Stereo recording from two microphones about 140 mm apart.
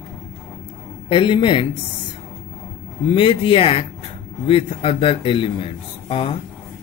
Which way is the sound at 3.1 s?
40° left (ahead or behind).